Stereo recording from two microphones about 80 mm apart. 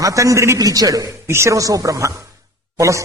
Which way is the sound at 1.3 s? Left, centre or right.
Right.